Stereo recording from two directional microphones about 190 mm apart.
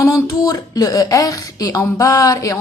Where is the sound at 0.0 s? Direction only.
20° left (ahead or behind).